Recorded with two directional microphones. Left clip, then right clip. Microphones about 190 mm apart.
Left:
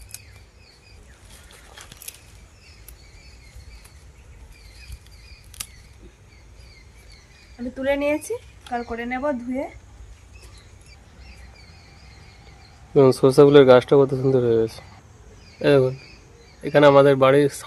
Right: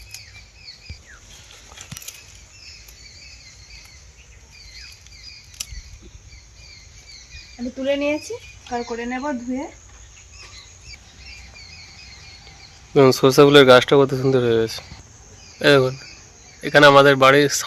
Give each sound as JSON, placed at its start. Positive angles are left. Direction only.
{"t": 7.8, "sound": "speech", "side_deg": 15}
{"t": 12.9, "sound": "speech", "side_deg": 0}